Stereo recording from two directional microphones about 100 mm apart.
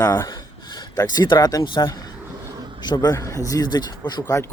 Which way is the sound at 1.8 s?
40° left (ahead or behind).